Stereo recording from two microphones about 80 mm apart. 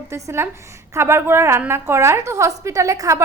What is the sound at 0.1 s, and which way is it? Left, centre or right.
A woman's voice, right.